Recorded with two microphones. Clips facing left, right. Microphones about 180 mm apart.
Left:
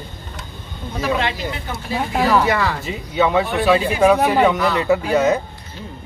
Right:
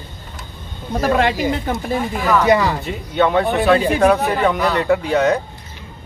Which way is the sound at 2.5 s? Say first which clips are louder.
Right 5 dB; 15° right (ahead or behind).